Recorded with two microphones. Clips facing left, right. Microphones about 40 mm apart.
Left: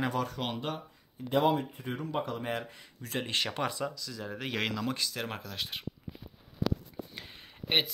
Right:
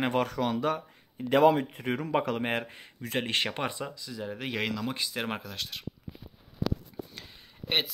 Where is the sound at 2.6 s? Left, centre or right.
Right.